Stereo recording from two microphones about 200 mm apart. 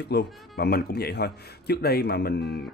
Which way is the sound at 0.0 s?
55° left (ahead or behind).